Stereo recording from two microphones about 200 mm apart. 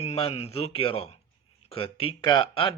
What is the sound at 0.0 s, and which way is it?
A man's voice, 30° left (ahead or behind).